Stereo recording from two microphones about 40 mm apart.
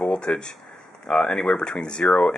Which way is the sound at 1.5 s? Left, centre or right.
Left.